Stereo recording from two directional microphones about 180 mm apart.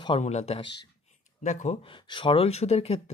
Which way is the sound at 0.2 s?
40° left (ahead or behind).